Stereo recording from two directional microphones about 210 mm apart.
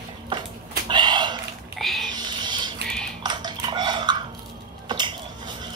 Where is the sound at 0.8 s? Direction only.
20° right (ahead or behind).